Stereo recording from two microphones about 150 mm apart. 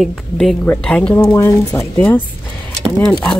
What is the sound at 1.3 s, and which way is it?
Speech, 20° left (ahead or behind).